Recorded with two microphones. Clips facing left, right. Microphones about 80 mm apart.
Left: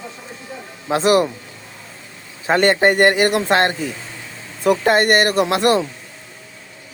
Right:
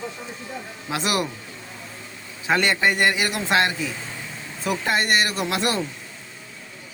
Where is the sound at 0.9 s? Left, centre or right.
Left.